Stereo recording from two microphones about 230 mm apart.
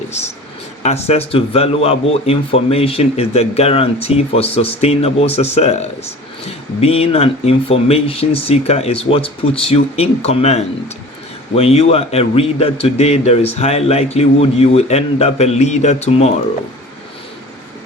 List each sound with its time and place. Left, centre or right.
0.8 s speech: left